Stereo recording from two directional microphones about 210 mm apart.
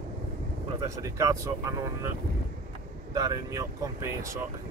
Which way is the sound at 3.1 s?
20° right (ahead or behind).